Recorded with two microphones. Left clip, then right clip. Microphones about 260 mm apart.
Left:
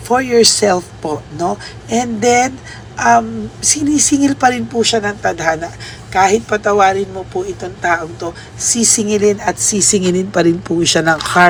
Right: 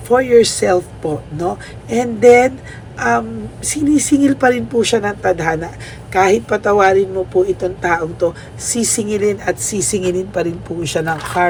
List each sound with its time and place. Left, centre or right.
0.1 s speech: centre